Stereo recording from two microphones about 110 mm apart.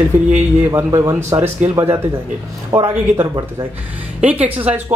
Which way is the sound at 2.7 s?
25° right (ahead or behind).